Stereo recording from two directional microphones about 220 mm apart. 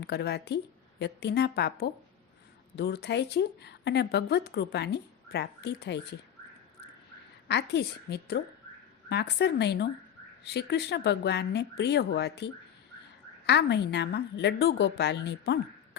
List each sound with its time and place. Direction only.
0.0 s speech: 50° left (ahead or behind)
7.4 s speech: 50° left (ahead or behind)
13.5 s speech: 50° left (ahead or behind)